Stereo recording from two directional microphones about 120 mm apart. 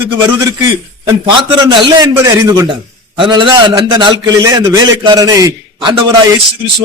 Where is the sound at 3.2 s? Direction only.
40° right (ahead or behind).